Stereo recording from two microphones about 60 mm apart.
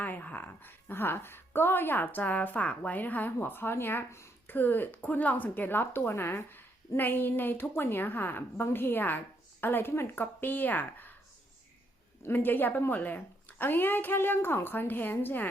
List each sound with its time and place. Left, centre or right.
0.0 s a woman's voice: left
12.2 s a woman's voice: left